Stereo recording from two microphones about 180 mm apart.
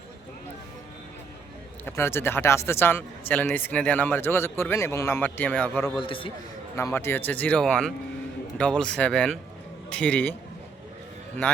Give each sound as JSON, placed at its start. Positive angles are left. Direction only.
{"t": 1.8, "sound": "speech", "side_deg": 15}
{"t": 6.0, "sound": "a man's voice", "side_deg": 30}
{"t": 6.7, "sound": "speech", "side_deg": 15}